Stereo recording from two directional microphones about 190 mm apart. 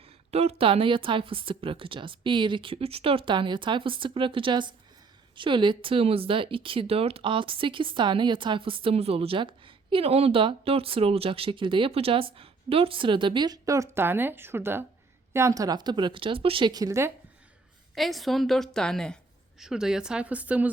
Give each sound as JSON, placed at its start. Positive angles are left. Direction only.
{"t": 0.3, "sound": "speech", "side_deg": -35}
{"t": 17.9, "sound": "a woman's voice", "side_deg": 0}